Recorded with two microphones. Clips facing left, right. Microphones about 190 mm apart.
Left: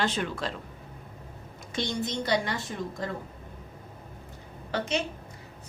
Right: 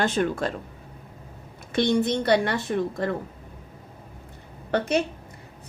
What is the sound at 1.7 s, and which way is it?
A woman's voice, 60° right (ahead or behind).